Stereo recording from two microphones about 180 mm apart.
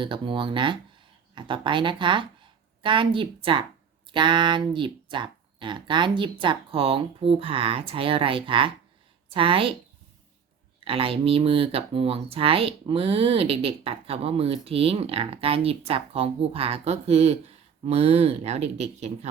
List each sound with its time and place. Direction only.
0.0 s a woman's voice: 30° right (ahead or behind)
10.8 s speech: 30° right (ahead or behind)